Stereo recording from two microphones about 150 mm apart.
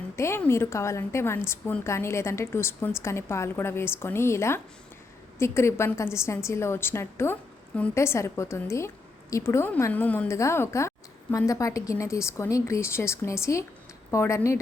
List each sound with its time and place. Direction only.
0.2 s a woman's voice: 15° left (ahead or behind)